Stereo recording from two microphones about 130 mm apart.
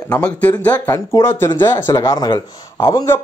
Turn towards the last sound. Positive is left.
turn(degrees=20)  # may be behind; listen again after turning